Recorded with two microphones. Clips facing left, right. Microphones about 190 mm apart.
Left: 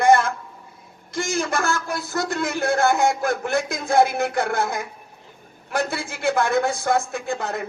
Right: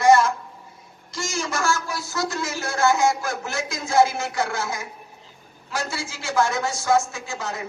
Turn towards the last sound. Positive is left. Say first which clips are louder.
# left 5 dB
turn(degrees=60)  # may be behind; listen again after turning